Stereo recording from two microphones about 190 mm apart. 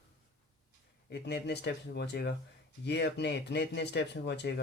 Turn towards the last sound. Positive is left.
turn(degrees=65)  # may be behind; listen again after turning